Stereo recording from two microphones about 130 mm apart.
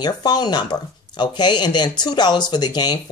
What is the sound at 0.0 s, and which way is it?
Speech, 30° left (ahead or behind).